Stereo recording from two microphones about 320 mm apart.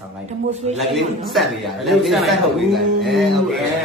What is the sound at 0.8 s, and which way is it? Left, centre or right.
Speech, centre.